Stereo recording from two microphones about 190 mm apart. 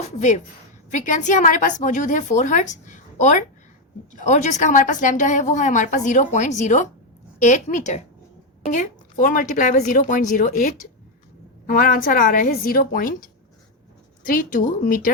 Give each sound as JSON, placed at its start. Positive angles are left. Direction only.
{"t": 0.9, "sound": "a woman's voice", "side_deg": 40}